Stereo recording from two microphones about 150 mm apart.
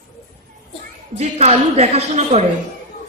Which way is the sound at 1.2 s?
45° right (ahead or behind).